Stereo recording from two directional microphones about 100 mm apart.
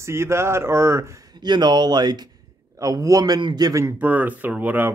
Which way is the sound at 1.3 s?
45° right (ahead or behind).